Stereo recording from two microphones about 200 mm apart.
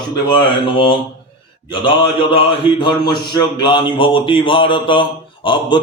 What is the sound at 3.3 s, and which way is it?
A man's voice, 25° left (ahead or behind).